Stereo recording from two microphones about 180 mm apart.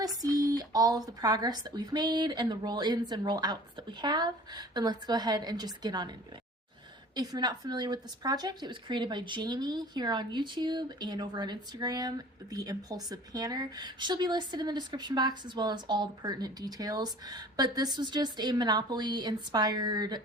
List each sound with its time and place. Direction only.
0.2 s speech: 20° right (ahead or behind)
7.2 s speech: 20° right (ahead or behind)